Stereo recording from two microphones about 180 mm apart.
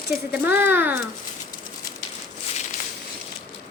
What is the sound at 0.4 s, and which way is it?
Speech, 10° right (ahead or behind).